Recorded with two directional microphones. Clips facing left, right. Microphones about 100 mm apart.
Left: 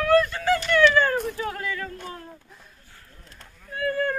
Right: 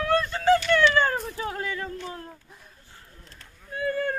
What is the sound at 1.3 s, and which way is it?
Speech, 25° right (ahead or behind).